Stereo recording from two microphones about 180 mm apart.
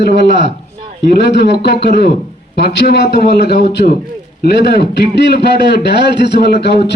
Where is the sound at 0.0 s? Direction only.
70° left (ahead or behind).